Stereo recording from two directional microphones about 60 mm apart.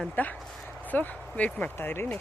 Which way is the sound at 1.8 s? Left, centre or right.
Left.